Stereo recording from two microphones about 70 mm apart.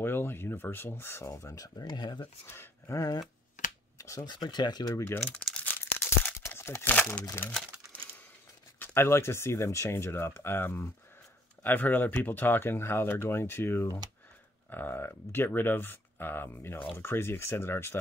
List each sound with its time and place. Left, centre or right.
0.0 s speech: left
2.4 s speech: left
4.0 s speech: left
4.3 s speech: left
4.9 s speech: left
5.2 s speech: centre
5.8 s crumpling: left
6.9 s speech: left
8.7 s speech: left